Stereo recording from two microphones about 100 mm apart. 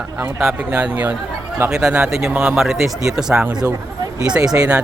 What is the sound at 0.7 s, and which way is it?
Speech, 15° right (ahead or behind).